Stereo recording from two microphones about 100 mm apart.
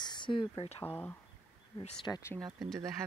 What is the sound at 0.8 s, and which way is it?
Speech, 20° left (ahead or behind).